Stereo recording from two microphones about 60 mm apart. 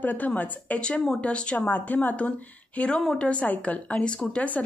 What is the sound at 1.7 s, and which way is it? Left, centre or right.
Speech, left.